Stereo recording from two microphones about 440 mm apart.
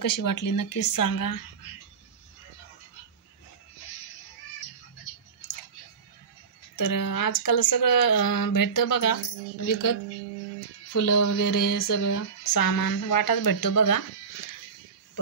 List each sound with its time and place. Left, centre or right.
0.0 s speech: left
6.8 s speech: left